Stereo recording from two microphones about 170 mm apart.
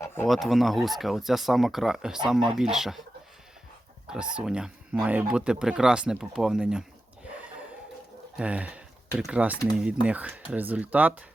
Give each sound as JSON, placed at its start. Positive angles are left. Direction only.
{"t": 0.3, "sound": "speech", "side_deg": 0}
{"t": 4.0, "sound": "speech", "side_deg": -5}
{"t": 8.4, "sound": "speech", "side_deg": -5}